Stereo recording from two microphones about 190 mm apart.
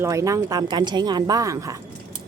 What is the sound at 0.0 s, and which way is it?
Speech, 15° right (ahead or behind).